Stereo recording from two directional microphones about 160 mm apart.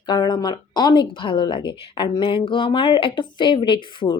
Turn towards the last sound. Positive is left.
turn(degrees=30)  # may be behind; listen again after turning